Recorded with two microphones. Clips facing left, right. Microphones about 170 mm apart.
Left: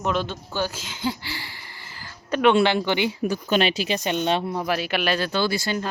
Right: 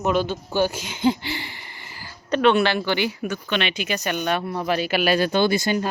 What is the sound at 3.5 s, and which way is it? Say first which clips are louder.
Speech: left 3 dB; 35° left (ahead or behind).